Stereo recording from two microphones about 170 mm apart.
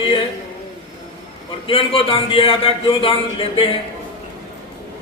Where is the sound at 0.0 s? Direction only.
30° left (ahead or behind).